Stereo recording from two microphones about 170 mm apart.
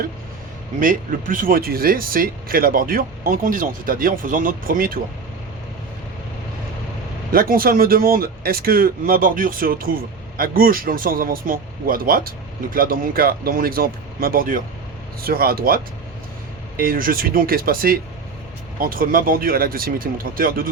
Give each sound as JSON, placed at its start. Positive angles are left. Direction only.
{"t": 0.8, "sound": "speech", "side_deg": -55}
{"t": 7.3, "sound": "speech", "side_deg": -60}